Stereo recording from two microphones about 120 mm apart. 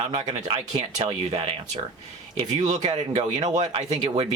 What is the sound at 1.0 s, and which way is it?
Speech, 50° right (ahead or behind).